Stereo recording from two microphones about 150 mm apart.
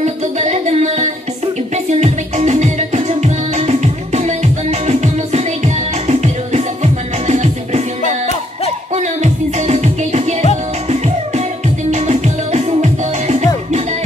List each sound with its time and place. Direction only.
0.0 s music: 50° right (ahead or behind)
8.9 s music: 50° right (ahead or behind)
11.9 s music: 45° right (ahead or behind)